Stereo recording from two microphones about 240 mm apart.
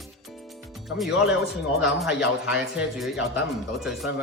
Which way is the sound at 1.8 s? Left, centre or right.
Centre.